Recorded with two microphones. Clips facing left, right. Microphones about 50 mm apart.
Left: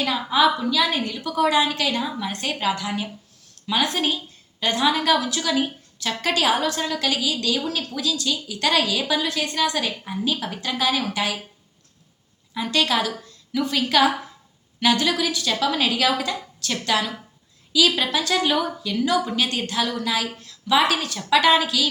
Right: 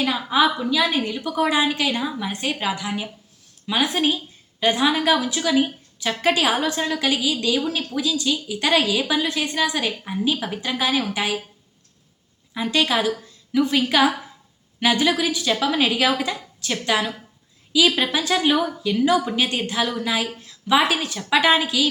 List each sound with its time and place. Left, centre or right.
0.3 s a woman's voice: centre
12.5 s a woman's voice: centre